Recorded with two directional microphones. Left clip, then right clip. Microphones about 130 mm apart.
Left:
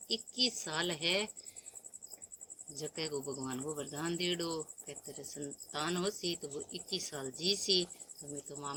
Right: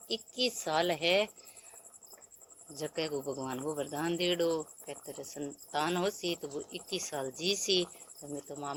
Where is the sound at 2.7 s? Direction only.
20° left (ahead or behind).